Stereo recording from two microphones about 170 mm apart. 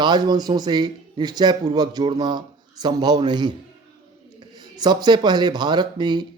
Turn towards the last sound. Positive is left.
turn(degrees=-25)  # may be behind; listen again after turning